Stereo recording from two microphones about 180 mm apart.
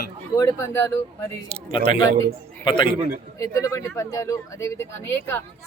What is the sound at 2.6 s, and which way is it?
Speech, 25° left (ahead or behind).